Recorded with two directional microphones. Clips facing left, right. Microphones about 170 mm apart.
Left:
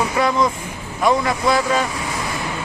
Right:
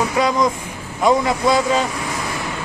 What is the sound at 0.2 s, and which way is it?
A man's voice, 15° right (ahead or behind).